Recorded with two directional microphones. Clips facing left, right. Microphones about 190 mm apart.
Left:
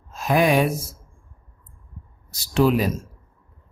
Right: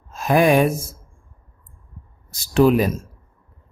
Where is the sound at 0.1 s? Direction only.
50° right (ahead or behind).